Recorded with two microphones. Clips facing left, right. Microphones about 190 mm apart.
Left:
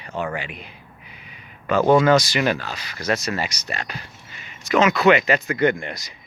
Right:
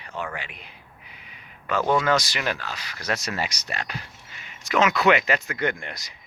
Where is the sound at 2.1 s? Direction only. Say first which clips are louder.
Left 6 dB; 5° left (ahead or behind).